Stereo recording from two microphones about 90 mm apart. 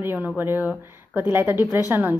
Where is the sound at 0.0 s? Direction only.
25° right (ahead or behind).